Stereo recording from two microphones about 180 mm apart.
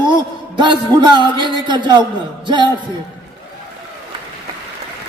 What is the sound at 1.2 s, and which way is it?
A man's voice, 25° right (ahead or behind).